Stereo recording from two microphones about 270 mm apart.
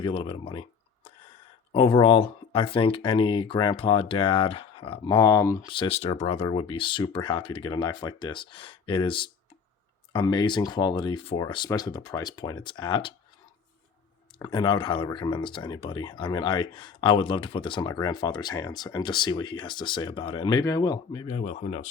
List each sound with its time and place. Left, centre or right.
0.0 s speech: centre
14.3 s speech: centre